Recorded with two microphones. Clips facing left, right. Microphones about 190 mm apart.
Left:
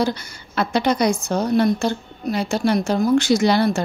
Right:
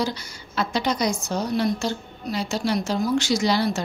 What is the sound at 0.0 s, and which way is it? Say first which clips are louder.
A woman's voice: left 5 dB; 55° left (ahead or behind).